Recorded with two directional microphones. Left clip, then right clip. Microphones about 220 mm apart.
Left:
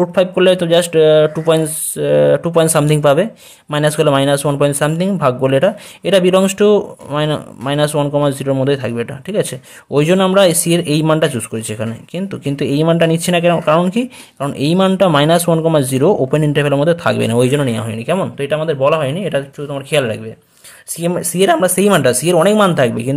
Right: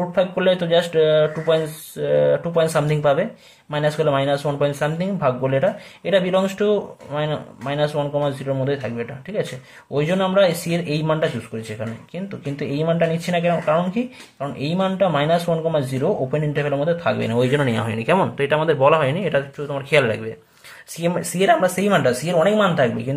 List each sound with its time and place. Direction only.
0.0 s speech: 40° left (ahead or behind)